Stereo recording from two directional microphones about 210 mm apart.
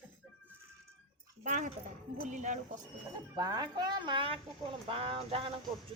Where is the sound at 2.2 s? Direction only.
35° right (ahead or behind).